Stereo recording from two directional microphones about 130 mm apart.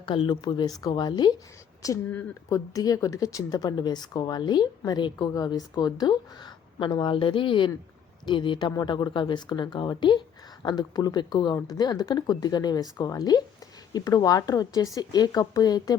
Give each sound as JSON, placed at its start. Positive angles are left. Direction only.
{"t": 0.0, "sound": "speech", "side_deg": 40}
{"t": 2.0, "sound": "speech", "side_deg": 15}
{"t": 2.7, "sound": "speech", "side_deg": 25}